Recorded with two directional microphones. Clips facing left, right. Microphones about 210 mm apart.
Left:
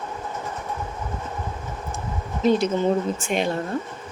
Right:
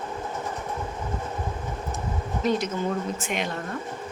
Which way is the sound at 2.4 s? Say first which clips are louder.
Left 6 dB; 30° left (ahead or behind).